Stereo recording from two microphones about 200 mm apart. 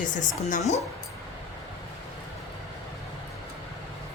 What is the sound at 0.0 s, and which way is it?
Speech, 40° left (ahead or behind).